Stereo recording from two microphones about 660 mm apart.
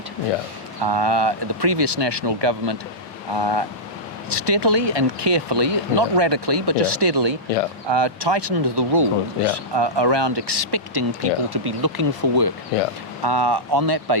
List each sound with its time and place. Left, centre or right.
0.9 s speech: right